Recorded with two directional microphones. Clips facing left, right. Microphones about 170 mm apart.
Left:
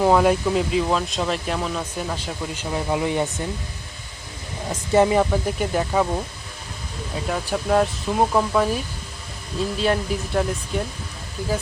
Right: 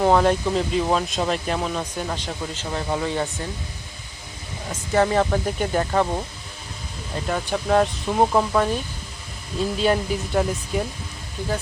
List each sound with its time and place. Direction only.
0.0 s speech: 5° left (ahead or behind)
4.9 s speech: 15° left (ahead or behind)
5.2 s speech: 5° left (ahead or behind)
7.3 s speech: centre (ahead or behind)